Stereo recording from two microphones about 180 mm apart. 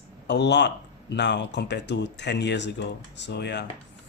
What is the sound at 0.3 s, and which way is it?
Speech, 70° left (ahead or behind).